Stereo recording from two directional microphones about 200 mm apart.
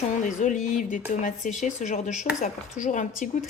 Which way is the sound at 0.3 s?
40° left (ahead or behind).